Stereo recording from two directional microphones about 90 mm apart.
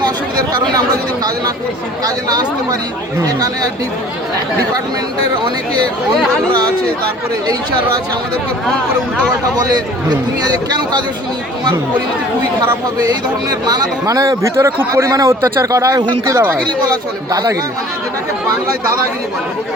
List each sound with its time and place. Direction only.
2.0 s a man's voice: 45° right (ahead or behind)
9.6 s a man's voice: 50° right (ahead or behind)
13.1 s a man's voice: 45° right (ahead or behind)
16.4 s speech: 20° right (ahead or behind)
17.3 s a man's voice: 40° right (ahead or behind)